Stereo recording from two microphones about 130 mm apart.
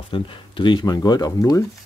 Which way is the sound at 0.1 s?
40° left (ahead or behind).